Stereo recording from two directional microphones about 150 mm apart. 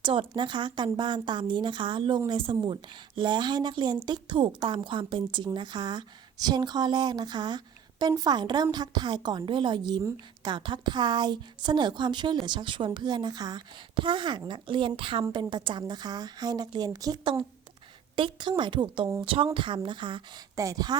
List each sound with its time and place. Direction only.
0.0 s a woman's voice: 35° right (ahead or behind)